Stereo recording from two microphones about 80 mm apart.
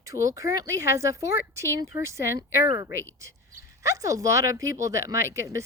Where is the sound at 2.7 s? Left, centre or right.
Right.